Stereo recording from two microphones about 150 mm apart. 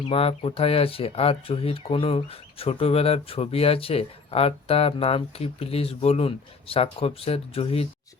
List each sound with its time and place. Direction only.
0.0 s speech: 40° left (ahead or behind)